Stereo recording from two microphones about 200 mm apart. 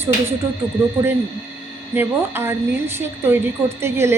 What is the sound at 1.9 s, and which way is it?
A woman's voice, 10° right (ahead or behind).